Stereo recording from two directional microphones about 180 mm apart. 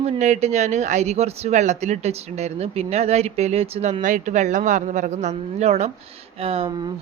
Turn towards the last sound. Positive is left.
turn(degrees=-30)  # may be behind; listen again after turning